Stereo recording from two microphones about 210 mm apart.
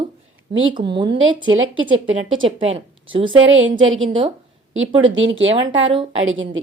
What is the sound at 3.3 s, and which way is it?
Speech, 65° right (ahead or behind).